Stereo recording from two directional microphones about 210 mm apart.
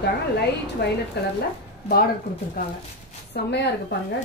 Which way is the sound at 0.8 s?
50° left (ahead or behind).